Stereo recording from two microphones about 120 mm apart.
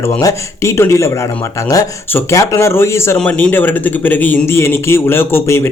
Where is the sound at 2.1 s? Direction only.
25° left (ahead or behind).